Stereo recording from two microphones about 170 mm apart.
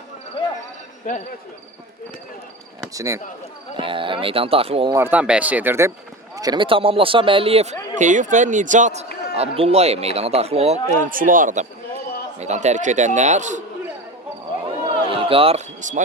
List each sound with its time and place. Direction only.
1.1 s a man's voice: 50° left (ahead or behind)
2.9 s speech: 20° right (ahead or behind)
3.8 s speech: 30° right (ahead or behind)
4.9 s a man's voice: 15° right (ahead or behind); by 10.8 s 35° right (ahead or behind)
11.0 s a man's voice: 55° right (ahead or behind)
14.8 s basketball bounce: 30° right (ahead or behind); by 16.0 s 45° right (ahead or behind)